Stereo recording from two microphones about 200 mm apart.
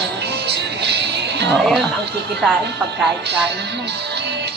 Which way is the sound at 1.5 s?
Centre (ahead or behind).